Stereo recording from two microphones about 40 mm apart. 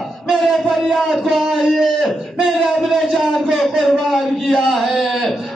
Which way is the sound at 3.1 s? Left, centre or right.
Centre.